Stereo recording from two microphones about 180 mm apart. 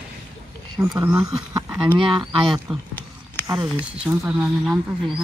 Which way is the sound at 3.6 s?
10° right (ahead or behind).